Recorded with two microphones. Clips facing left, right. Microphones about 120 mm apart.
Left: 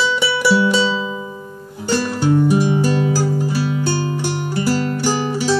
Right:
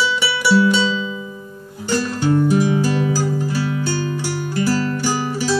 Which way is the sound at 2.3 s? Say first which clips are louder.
Left 1 dB; 20° left (ahead or behind).